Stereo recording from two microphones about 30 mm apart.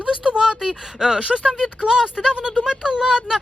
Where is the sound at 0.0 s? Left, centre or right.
Right.